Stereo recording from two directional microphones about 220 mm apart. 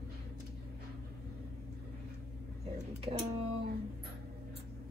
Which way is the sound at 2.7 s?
25° right (ahead or behind).